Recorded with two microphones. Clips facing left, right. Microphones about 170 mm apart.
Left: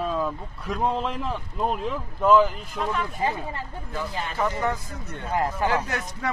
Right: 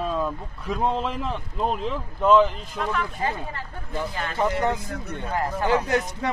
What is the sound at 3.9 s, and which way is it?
Speech, 25° right (ahead or behind).